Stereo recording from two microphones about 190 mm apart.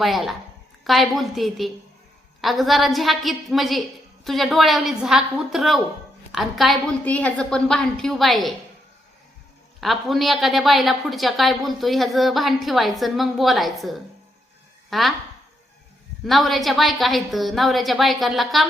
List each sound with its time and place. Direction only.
0.0 s a woman's voice: centre (ahead or behind)
9.8 s a woman's voice: centre (ahead or behind)
16.2 s a woman's voice: centre (ahead or behind)